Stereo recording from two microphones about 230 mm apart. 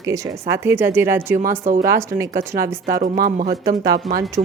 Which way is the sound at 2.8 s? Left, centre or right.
Right.